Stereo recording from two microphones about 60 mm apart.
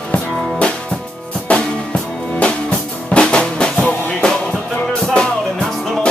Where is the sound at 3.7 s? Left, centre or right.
Left.